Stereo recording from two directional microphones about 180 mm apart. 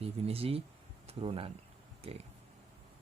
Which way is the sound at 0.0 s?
30° right (ahead or behind).